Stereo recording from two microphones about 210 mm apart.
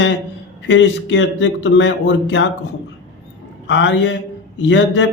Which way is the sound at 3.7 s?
60° left (ahead or behind).